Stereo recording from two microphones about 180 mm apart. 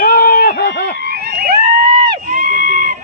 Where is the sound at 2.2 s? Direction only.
50° right (ahead or behind).